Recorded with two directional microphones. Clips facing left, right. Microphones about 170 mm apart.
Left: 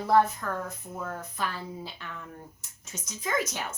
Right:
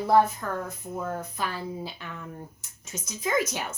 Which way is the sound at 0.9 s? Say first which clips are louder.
Right 5 dB; 20° right (ahead or behind).